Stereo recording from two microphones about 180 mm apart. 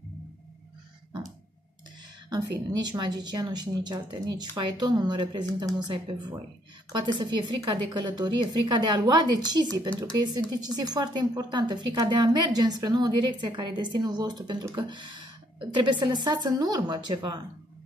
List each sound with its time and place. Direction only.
2.7 s a woman's voice: 25° right (ahead or behind)